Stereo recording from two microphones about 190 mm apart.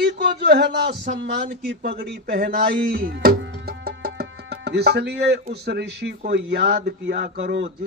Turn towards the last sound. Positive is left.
turn(degrees=-65)  # may be behind; listen again after turning